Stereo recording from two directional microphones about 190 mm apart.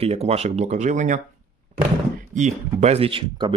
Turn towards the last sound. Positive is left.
turn(degrees=-30)  # may be behind; listen again after turning